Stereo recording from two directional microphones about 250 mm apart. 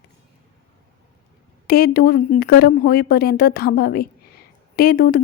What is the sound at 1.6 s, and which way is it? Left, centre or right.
A woman's voice, left.